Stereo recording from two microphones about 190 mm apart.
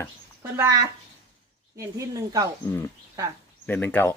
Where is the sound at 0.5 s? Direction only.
15° right (ahead or behind).